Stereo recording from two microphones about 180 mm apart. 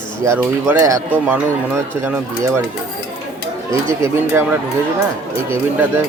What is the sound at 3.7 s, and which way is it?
Speech, 15° right (ahead or behind).